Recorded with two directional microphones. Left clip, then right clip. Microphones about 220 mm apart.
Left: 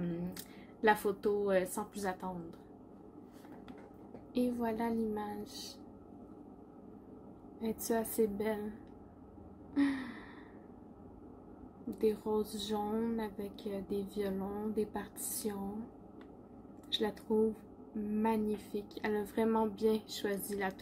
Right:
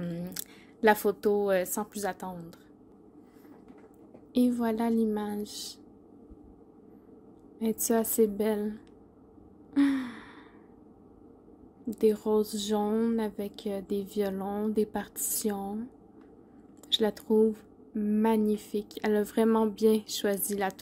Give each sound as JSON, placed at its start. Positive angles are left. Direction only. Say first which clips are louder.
{"t": 0.0, "sound": "a woman's voice", "louder": "right 3 dB", "side_deg": -50}
{"t": 4.3, "sound": "a woman's voice", "louder": "right 7 dB", "side_deg": -50}
{"t": 7.5, "sound": "a woman's voice", "louder": "right 7 dB", "side_deg": -50}
{"t": 9.8, "sound": "a woman's voice", "louder": "right 7 dB", "side_deg": -50}
{"t": 11.9, "sound": "a woman's voice", "louder": "right 7 dB", "side_deg": -50}
{"t": 16.9, "sound": "a woman's voice", "louder": "right 8 dB", "side_deg": -50}